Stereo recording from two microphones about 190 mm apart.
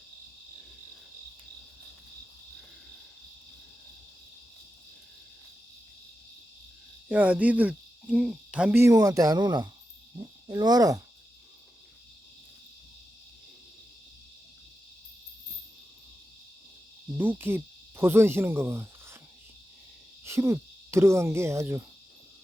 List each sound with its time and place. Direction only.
7.1 s cricket: 10° right (ahead or behind)
10.5 s speech: 20° right (ahead or behind)
17.2 s cricket: 10° right (ahead or behind)
20.2 s cricket: 15° right (ahead or behind)